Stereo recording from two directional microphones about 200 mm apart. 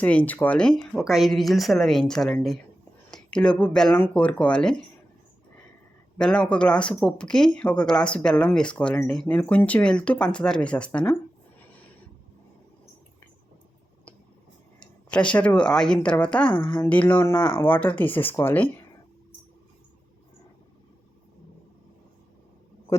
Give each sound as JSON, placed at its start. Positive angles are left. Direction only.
{"t": 0.0, "sound": "speech", "side_deg": 5}
{"t": 6.1, "sound": "speech", "side_deg": 5}
{"t": 14.8, "sound": "speech", "side_deg": 5}
{"t": 16.5, "sound": "speech", "side_deg": 25}
{"t": 16.8, "sound": "speech", "side_deg": 10}